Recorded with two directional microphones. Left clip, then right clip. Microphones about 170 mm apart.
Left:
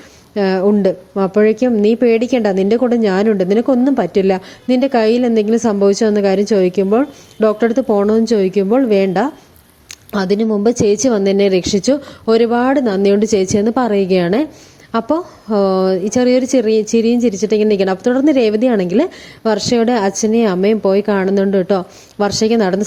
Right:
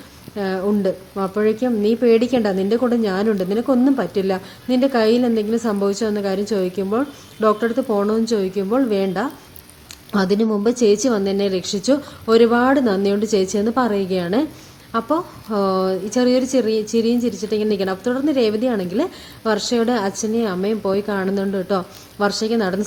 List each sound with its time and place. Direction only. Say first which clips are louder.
0.3 s a woman's voice: left 7 dB; 35° left (ahead or behind)